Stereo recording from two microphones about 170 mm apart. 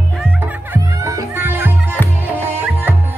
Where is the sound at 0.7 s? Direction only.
20° right (ahead or behind).